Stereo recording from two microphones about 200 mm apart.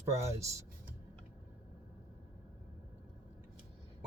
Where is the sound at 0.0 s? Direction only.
15° right (ahead or behind).